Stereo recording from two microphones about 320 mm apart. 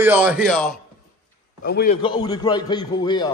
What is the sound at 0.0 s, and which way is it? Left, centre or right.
Speech, centre.